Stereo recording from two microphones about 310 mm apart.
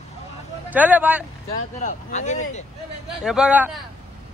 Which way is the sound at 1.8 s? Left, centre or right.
Left.